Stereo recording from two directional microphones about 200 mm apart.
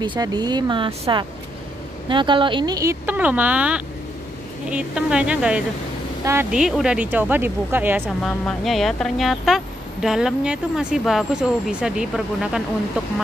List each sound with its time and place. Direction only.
0.0 s speech: 20° right (ahead or behind)
8.2 s speech: centre (ahead or behind)